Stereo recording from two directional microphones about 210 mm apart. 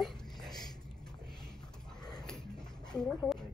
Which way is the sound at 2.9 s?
5° left (ahead or behind).